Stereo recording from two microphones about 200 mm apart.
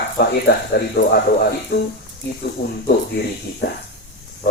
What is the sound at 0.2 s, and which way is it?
Speech, 55° left (ahead or behind).